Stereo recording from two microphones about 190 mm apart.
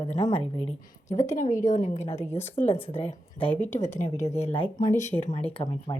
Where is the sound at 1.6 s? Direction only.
40° left (ahead or behind).